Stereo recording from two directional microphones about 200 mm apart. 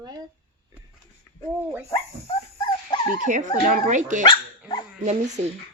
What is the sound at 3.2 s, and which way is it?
Speech, 40° right (ahead or behind).